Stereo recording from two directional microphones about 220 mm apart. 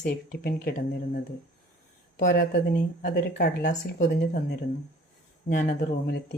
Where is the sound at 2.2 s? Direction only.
35° left (ahead or behind).